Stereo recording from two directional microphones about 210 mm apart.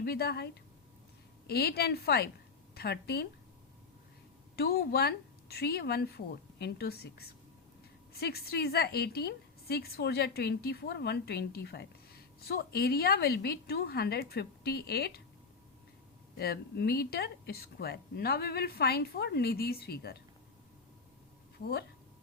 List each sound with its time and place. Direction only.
0.0 s a woman's voice: 50° left (ahead or behind)
4.5 s a woman's voice: 50° left (ahead or behind)
16.4 s a woman's voice: 50° left (ahead or behind)